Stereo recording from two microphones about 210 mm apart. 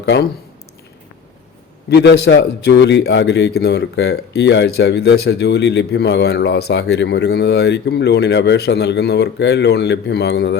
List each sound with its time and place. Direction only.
0.0 s a man's voice: 55° left (ahead or behind)
1.9 s a man's voice: 55° left (ahead or behind)